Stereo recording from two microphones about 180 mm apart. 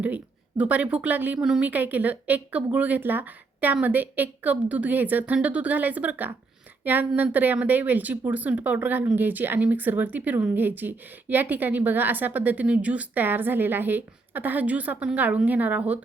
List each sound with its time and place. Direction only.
0.0 s speech: 10° right (ahead or behind)